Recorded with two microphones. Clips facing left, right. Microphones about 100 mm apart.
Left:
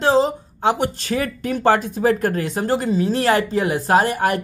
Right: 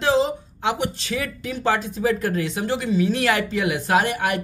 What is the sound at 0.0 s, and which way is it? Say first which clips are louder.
Speech: left 3 dB; 40° left (ahead or behind).